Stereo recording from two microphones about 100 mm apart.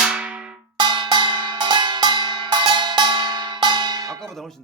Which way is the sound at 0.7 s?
50° right (ahead or behind).